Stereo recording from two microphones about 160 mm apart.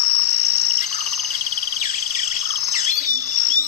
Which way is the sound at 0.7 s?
50° left (ahead or behind).